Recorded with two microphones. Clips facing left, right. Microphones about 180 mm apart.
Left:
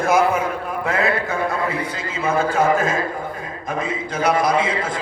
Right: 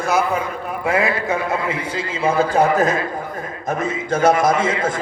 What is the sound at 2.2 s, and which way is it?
Speech, 35° right (ahead or behind).